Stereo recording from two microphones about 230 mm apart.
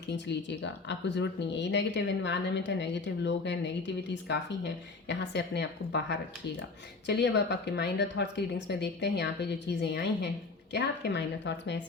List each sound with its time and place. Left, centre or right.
0.1 s speech: left